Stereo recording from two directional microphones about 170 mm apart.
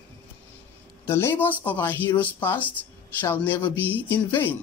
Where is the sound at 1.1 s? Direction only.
15° left (ahead or behind).